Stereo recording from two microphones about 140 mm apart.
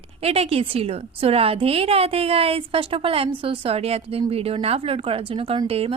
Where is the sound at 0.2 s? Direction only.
45° right (ahead or behind).